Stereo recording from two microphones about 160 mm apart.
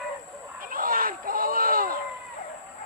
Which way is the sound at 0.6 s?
60° right (ahead or behind).